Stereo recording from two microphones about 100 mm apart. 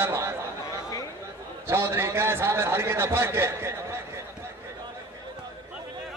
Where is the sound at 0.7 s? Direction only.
35° left (ahead or behind).